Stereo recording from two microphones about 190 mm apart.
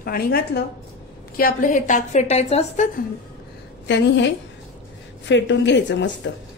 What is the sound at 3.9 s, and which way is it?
Speech, 70° left (ahead or behind).